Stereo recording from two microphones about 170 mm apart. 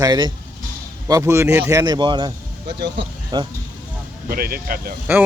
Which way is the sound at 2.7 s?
85° right.